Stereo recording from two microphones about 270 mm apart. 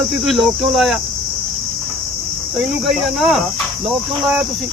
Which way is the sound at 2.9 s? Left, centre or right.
Centre.